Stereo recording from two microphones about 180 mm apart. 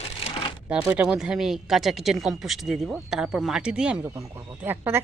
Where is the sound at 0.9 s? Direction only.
5° right (ahead or behind).